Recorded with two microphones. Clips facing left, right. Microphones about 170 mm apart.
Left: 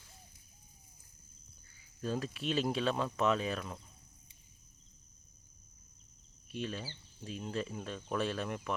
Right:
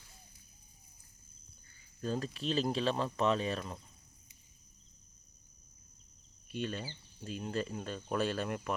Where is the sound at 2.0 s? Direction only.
Centre (ahead or behind).